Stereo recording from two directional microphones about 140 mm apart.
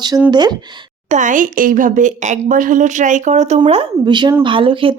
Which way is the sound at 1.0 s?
60° right (ahead or behind).